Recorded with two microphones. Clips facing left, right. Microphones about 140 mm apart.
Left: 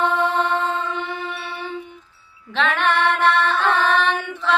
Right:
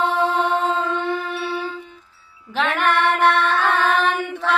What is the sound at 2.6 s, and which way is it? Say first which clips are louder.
Music: even; 5° right (ahead or behind).